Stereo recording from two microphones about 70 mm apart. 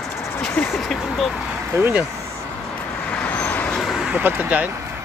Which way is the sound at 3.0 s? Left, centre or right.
Centre.